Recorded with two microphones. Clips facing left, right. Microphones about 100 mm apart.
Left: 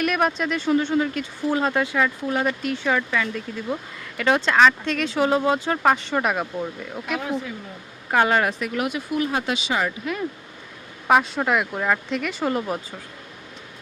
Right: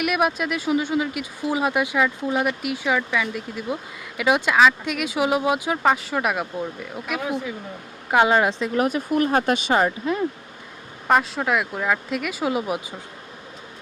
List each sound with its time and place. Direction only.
0.0 s speech: 5° right (ahead or behind)
8.1 s speech: 20° right (ahead or behind); by 9.8 s 45° right (ahead or behind)
9.8 s speech: 30° right (ahead or behind)
11.1 s speech: centre (ahead or behind)